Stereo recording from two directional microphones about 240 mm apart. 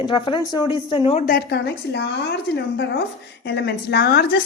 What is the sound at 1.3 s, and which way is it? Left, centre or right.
A woman's voice, left.